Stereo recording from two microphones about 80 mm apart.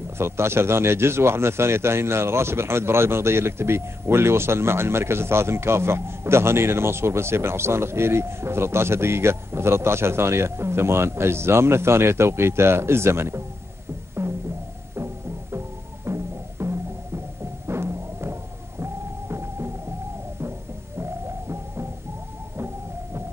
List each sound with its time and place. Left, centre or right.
0.2 s a man's voice: right
14.2 s music: right
16.1 s music: right
21.0 s music: right